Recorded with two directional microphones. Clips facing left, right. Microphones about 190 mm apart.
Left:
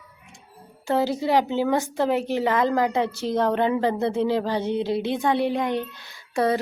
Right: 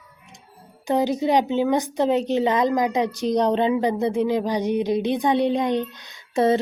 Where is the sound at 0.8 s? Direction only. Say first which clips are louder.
Right 2 dB; 15° right (ahead or behind).